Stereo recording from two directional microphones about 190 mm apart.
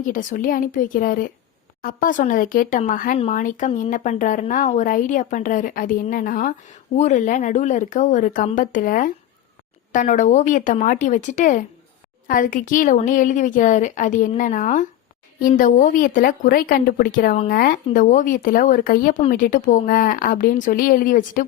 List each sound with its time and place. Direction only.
0.0 s a woman's voice: 45° left (ahead or behind)